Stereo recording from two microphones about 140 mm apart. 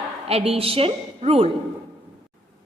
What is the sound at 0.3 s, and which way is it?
A woman's voice, 45° right (ahead or behind).